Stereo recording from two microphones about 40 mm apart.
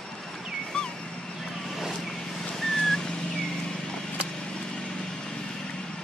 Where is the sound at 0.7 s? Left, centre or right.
Left.